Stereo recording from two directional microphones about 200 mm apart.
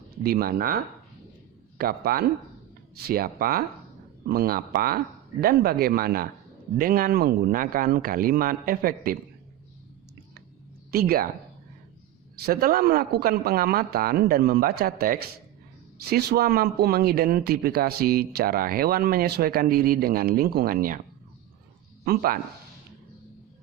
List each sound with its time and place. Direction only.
0.2 s speech: 50° right (ahead or behind)
1.8 s speech: 50° right (ahead or behind)
10.9 s speech: 50° right (ahead or behind)
12.4 s speech: 50° right (ahead or behind)
22.0 s speech: 50° right (ahead or behind)